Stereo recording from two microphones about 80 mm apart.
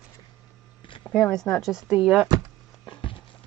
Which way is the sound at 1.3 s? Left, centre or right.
Centre.